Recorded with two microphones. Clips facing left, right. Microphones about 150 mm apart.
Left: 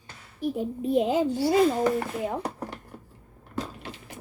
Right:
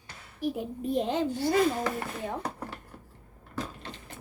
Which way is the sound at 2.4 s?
20° left (ahead or behind).